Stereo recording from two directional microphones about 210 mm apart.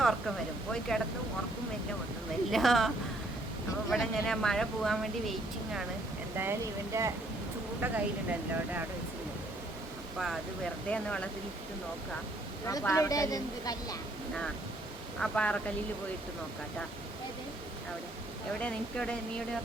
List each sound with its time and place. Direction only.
0.0 s speech: centre (ahead or behind)
2.5 s speech: centre (ahead or behind)
6.3 s speech: 10° right (ahead or behind)
10.8 s speech: 5° left (ahead or behind)
12.6 s a woman's voice: 15° left (ahead or behind)
15.2 s speech: 5° left (ahead or behind)
18.6 s speech: 5° left (ahead or behind)